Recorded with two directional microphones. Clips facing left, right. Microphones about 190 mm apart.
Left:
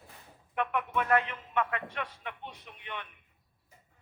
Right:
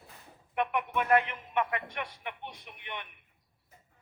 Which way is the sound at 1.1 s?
15° right (ahead or behind).